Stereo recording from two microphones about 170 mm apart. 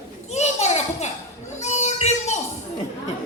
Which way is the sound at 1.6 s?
40° left (ahead or behind).